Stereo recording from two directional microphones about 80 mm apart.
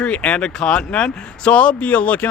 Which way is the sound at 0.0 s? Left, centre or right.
Centre.